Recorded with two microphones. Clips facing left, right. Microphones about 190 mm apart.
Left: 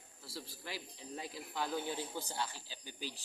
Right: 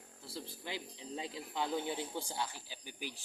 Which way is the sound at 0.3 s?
20° right (ahead or behind).